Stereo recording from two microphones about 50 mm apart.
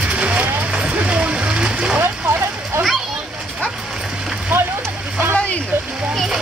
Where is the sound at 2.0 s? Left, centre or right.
Right.